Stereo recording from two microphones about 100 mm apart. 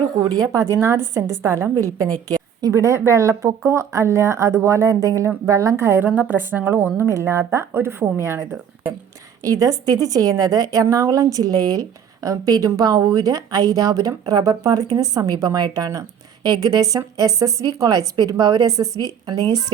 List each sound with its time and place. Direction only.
0.2 s a woman's voice: 40° right (ahead or behind)
9.4 s a woman's voice: 35° right (ahead or behind)